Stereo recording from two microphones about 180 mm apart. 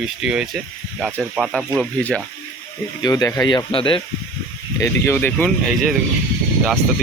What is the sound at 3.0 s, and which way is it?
Speech, 20° left (ahead or behind).